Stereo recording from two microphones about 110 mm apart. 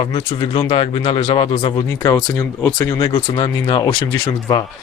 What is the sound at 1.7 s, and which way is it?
Speech, 35° left (ahead or behind).